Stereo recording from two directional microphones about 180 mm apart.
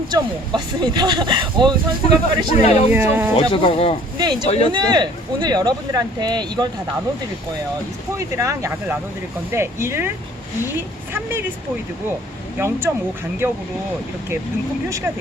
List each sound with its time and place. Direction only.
0.1 s speech: 25° right (ahead or behind)
2.5 s speech: 35° left (ahead or behind)
2.9 s a woman's voice: 10° right (ahead or behind)
3.5 s speech: 30° left (ahead or behind)
4.2 s speech: 25° right (ahead or behind)
4.4 s speech: 35° left (ahead or behind)
4.7 s speech: 25° right (ahead or behind)
8.4 s a woman's voice: 15° right (ahead or behind)
12.5 s a woman's voice: 10° right (ahead or behind)
14.8 s a woman's voice: 15° right (ahead or behind)